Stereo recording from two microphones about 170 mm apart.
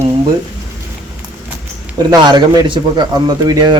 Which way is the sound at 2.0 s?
25° right (ahead or behind).